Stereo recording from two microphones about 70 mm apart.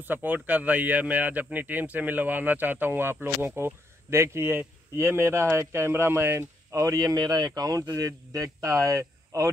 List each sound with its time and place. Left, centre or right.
0.0 s speech: right